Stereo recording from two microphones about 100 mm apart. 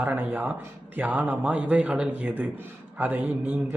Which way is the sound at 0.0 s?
15° right (ahead or behind).